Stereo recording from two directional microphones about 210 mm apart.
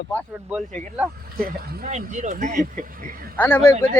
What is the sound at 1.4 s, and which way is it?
Speech, 35° right (ahead or behind).